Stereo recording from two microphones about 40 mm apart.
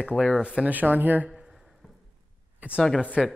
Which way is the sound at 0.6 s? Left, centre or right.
Right.